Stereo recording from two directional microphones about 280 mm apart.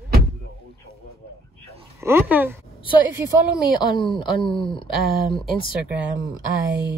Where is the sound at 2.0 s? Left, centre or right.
Centre.